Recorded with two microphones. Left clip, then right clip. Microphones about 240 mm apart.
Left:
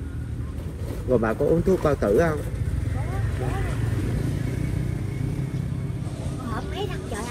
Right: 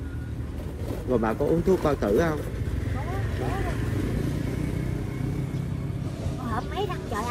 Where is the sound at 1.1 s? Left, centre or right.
Centre.